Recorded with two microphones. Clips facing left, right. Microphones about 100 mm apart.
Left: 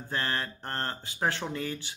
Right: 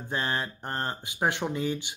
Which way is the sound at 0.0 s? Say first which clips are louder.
Right 2 dB; 20° right (ahead or behind).